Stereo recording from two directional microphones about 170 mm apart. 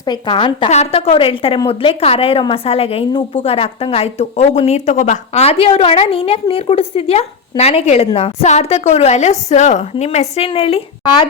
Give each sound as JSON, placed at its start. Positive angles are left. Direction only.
{"t": 0.0, "sound": "a woman's voice", "side_deg": 25}